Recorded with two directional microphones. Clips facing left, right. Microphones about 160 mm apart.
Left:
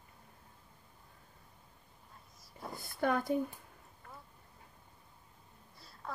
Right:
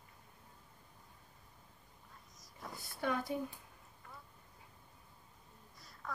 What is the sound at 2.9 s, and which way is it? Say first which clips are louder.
Speech: left 5 dB; 50° left (ahead or behind).